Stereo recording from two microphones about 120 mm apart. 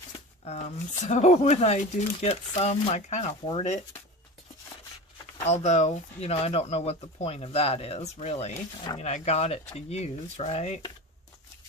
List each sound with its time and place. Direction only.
0.4 s speech: 70° left (ahead or behind)
5.4 s speech: 70° left (ahead or behind)